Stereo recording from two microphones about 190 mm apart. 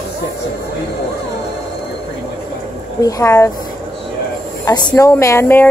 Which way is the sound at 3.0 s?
15° left (ahead or behind).